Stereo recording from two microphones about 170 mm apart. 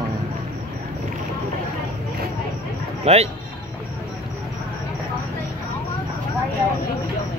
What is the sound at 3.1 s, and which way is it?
Speech, 40° right (ahead or behind).